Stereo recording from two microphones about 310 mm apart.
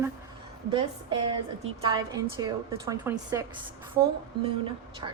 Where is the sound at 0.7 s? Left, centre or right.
Centre.